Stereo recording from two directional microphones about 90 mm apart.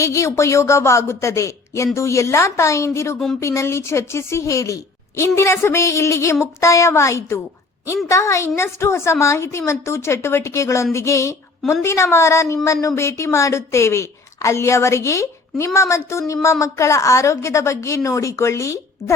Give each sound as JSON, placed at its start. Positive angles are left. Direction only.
{"t": 0.0, "sound": "a woman's voice", "side_deg": 35}